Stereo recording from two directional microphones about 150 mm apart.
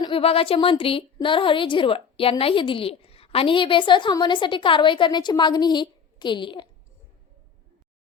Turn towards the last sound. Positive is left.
turn(degrees=30)  # may be behind; listen again after turning